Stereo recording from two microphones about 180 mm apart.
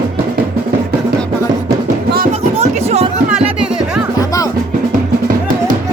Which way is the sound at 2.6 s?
35° right (ahead or behind).